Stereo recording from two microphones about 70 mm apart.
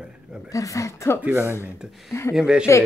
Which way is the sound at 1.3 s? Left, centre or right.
Right.